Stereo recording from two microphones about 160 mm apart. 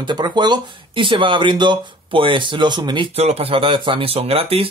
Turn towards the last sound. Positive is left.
turn(degrees=-35)  # may be behind; listen again after turning